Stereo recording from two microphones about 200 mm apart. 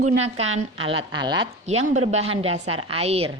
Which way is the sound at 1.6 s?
35° right (ahead or behind).